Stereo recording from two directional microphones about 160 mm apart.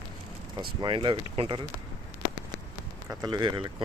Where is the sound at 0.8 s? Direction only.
30° right (ahead or behind).